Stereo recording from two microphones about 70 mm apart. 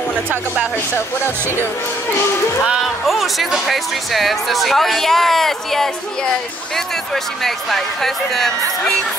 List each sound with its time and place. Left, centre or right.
0.9 s speech: left
2.6 s speech: centre
7.4 s speech: centre